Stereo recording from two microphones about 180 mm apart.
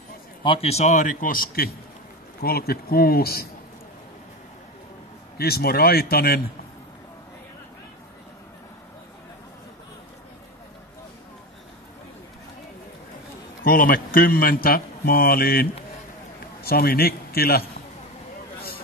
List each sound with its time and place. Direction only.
0.4 s a man's voice: 30° left (ahead or behind); by 3.4 s 60° left (ahead or behind)
5.4 s a man's voice: 60° left (ahead or behind)
13.7 s a man's voice: 55° left (ahead or behind)